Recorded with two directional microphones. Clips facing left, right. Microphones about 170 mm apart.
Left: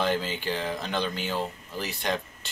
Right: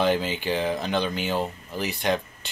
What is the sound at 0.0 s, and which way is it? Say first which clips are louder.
Speech: right 4 dB; 5° right (ahead or behind).